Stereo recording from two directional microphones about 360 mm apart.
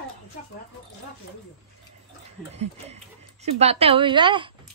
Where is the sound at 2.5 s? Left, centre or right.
Centre.